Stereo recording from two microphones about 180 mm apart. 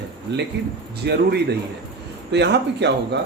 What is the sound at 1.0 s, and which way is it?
Speech, 65° right (ahead or behind).